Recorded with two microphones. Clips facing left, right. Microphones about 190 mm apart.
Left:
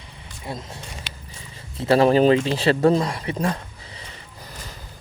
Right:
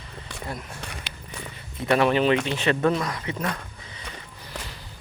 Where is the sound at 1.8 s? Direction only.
30° left (ahead or behind).